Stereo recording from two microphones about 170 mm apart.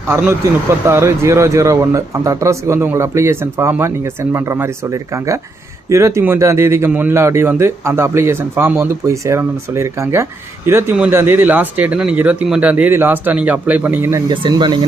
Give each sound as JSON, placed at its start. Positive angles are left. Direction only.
{"t": 0.9, "sound": "speech", "side_deg": -15}
{"t": 14.4, "sound": "speech", "side_deg": -25}